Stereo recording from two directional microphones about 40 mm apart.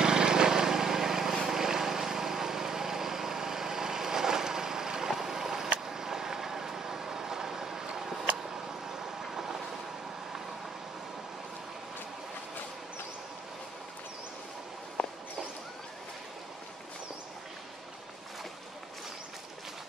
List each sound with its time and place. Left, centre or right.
0.0 s vehicle: centre
15.0 s walk: left